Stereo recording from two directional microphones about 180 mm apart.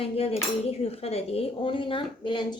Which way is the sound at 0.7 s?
35° left (ahead or behind).